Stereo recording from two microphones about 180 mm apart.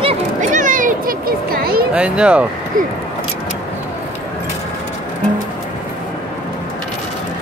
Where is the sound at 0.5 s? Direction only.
45° right (ahead or behind).